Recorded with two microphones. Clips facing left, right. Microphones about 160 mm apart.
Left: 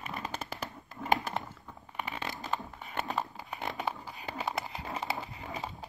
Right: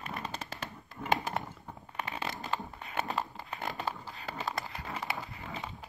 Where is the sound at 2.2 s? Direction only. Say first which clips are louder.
Right 1 dB; centre (ahead or behind).